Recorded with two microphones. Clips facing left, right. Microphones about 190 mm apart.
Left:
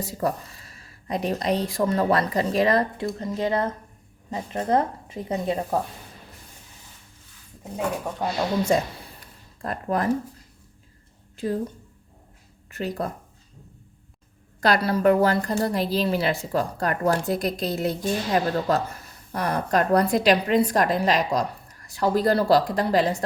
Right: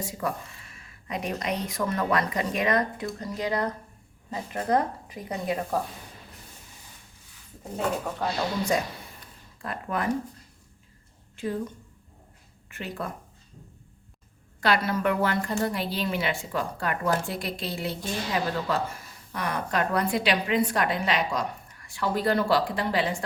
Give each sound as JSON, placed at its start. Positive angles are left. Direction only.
{"t": 0.0, "sound": "speech", "side_deg": 35}
{"t": 7.6, "sound": "speech", "side_deg": 10}
{"t": 9.6, "sound": "speech", "side_deg": 40}
{"t": 11.3, "sound": "speech", "side_deg": 35}
{"t": 12.7, "sound": "speech", "side_deg": 40}
{"t": 14.6, "sound": "speech", "side_deg": 35}